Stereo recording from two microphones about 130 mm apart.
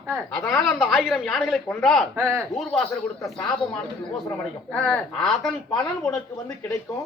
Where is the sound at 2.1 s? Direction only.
20° right (ahead or behind).